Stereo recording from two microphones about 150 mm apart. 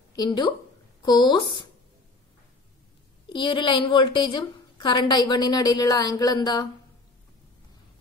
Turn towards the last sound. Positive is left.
turn(degrees=25)  # may be behind; listen again after turning